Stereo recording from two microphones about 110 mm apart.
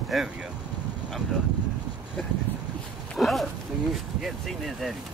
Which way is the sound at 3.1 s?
Centre (ahead or behind).